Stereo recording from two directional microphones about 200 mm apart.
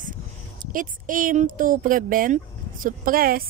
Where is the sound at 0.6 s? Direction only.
45° right (ahead or behind).